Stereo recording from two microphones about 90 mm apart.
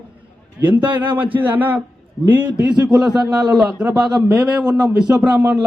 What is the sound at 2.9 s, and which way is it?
Speech, 50° right (ahead or behind).